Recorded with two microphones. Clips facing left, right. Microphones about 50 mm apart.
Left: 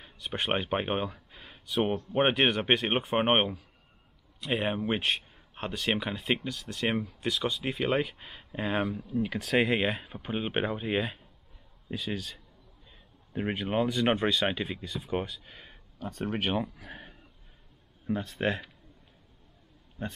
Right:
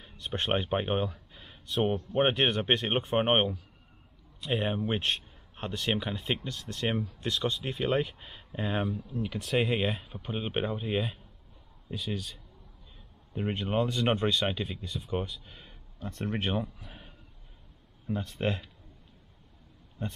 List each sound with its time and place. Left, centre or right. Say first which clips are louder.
0.0 s speech: even; centre
7.5 s speech: left 1 dB; centre
13.3 s speech: left 1 dB; centre
15.7 s a sound: left 2 dB; left
16.4 s speech: left 3 dB; left
18.0 s speech: left 2 dB; centre
20.0 s speech: left 1 dB; left